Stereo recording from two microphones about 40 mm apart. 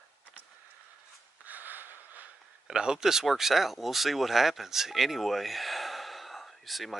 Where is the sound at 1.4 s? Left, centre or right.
Right.